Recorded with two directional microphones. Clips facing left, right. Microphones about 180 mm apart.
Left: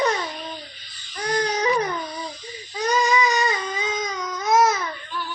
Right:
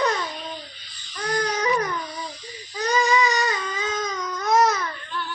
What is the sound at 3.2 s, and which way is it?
Baby cry, 15° left (ahead or behind).